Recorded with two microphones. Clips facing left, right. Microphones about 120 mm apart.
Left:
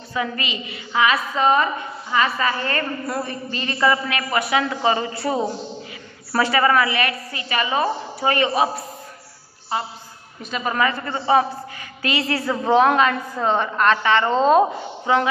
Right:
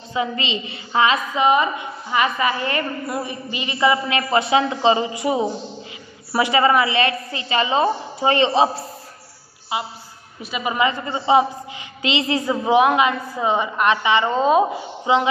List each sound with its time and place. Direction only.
0.1 s a woman's voice: 25° right (ahead or behind)
1.3 s a woman's voice: 15° right (ahead or behind)
4.2 s a woman's voice: 25° right (ahead or behind)
9.7 s a woman's voice: 10° right (ahead or behind)
15.1 s a woman's voice: 15° right (ahead or behind)